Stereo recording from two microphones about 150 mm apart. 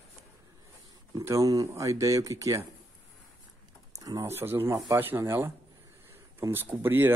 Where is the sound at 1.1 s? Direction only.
20° right (ahead or behind).